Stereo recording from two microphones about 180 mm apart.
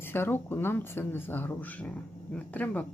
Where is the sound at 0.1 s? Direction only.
10° left (ahead or behind).